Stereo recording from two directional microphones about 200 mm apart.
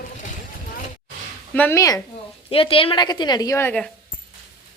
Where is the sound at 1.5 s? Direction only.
10° left (ahead or behind).